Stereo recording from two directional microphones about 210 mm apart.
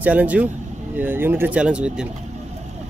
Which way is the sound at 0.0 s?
5° right (ahead or behind).